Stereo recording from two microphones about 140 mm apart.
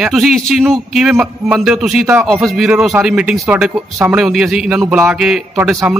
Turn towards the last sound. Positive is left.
turn(degrees=-5)  # may be behind; listen again after turning